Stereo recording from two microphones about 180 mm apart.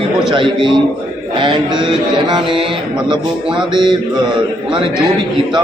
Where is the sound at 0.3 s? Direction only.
25° right (ahead or behind).